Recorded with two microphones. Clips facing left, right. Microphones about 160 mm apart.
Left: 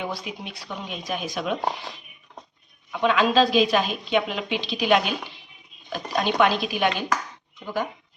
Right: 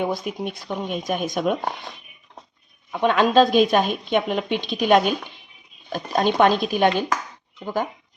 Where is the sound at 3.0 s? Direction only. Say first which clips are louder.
Right 3 dB; 45° right (ahead or behind).